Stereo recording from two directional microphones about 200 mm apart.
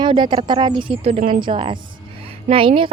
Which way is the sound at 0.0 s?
25° right (ahead or behind).